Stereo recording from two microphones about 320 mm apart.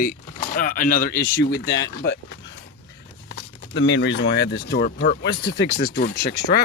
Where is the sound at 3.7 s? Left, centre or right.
Left.